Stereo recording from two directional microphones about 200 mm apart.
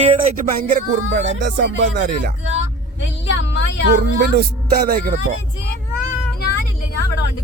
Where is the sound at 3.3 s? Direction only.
65° left (ahead or behind).